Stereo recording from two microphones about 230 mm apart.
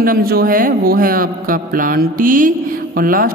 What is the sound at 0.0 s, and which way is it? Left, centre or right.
Speech, right.